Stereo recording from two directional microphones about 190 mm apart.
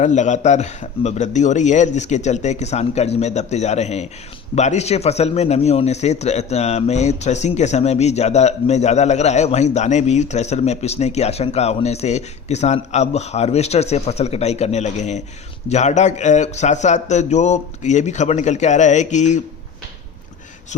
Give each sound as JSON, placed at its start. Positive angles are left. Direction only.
{"t": 0.0, "sound": "a man's voice", "side_deg": 40}